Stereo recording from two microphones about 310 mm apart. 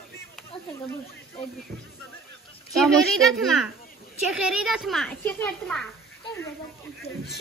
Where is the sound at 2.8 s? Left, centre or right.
Centre.